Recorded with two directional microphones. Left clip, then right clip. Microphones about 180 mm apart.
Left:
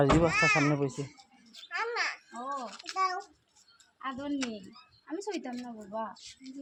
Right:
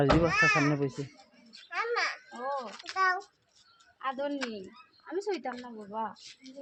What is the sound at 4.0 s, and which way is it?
A woman's voice, 40° right (ahead or behind).